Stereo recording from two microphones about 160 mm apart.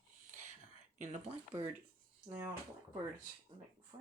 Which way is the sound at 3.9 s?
30° right (ahead or behind).